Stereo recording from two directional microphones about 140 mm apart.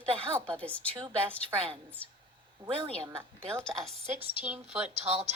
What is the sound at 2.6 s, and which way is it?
Speech, 35° right (ahead or behind).